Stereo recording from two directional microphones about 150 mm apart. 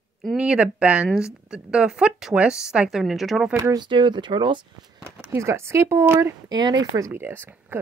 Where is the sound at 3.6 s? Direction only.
25° right (ahead or behind).